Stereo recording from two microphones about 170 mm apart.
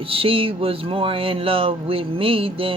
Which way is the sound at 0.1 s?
35° right (ahead or behind).